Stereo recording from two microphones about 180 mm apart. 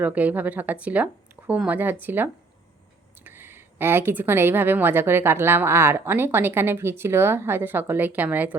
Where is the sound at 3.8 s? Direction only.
10° right (ahead or behind).